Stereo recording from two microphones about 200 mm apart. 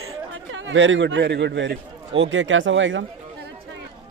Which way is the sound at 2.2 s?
75° right (ahead or behind).